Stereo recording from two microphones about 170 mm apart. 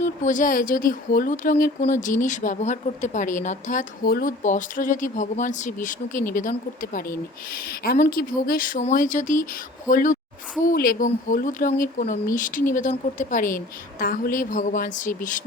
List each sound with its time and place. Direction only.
0.0 s speech: 50° left (ahead or behind)